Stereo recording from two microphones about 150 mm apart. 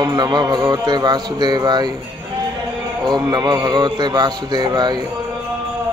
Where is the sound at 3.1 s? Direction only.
25° right (ahead or behind).